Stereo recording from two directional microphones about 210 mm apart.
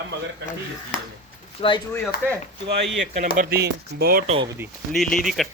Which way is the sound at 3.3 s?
45° right (ahead or behind).